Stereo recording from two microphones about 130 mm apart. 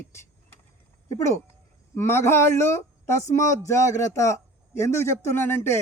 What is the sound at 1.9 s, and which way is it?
A man's voice, 20° left (ahead or behind).